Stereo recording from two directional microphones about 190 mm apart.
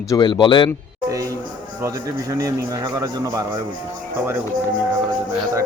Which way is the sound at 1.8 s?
15° right (ahead or behind).